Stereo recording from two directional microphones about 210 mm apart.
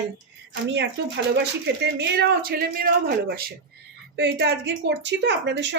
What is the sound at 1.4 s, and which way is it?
A woman's voice, 55° right (ahead or behind).